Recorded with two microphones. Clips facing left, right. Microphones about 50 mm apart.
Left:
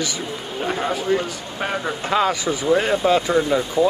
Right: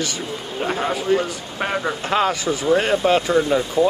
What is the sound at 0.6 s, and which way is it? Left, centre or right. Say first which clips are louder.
Speech: right 1 dB; centre.